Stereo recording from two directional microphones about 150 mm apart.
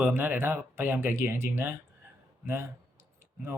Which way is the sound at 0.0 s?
15° right (ahead or behind).